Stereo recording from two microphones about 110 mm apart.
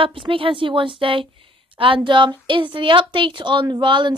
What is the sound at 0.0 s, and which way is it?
A woman's voice, 50° right (ahead or behind).